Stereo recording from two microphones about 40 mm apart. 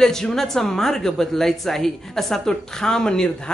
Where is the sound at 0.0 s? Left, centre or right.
Centre.